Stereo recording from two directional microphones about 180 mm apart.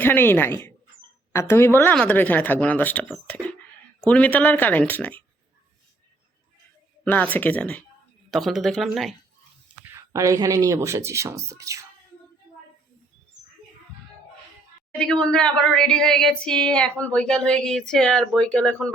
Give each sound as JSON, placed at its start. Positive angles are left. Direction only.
{"t": 0.0, "sound": "speech", "side_deg": 10}
{"t": 7.0, "sound": "speech", "side_deg": 10}
{"t": 9.8, "sound": "speech", "side_deg": -15}
{"t": 14.9, "sound": "speech", "side_deg": 5}